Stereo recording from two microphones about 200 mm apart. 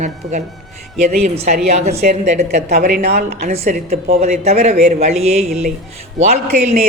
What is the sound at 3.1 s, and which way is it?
Speech, 55° right (ahead or behind).